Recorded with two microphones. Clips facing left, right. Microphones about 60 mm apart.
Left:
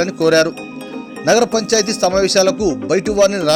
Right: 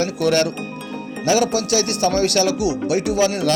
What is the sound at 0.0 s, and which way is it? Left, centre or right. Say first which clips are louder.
Speech: left 5 dB; left.